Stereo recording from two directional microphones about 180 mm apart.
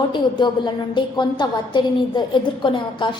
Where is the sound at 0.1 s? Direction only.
25° left (ahead or behind).